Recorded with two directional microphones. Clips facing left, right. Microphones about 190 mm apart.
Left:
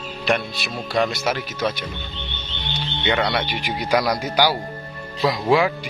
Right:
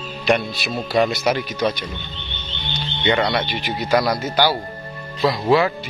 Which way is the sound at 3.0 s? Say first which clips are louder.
Right 2 dB; 5° left (ahead or behind).